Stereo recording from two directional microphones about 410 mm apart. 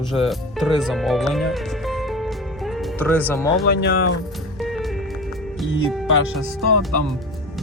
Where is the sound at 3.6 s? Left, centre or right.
Left.